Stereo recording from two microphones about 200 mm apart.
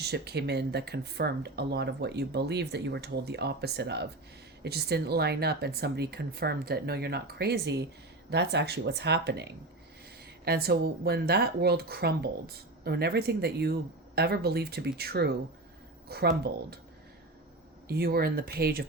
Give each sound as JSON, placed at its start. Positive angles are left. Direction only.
{"t": 0.0, "sound": "speech", "side_deg": -55}
{"t": 17.8, "sound": "speech", "side_deg": -50}